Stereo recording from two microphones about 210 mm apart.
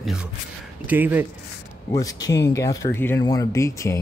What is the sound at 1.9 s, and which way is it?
Speech, 15° left (ahead or behind).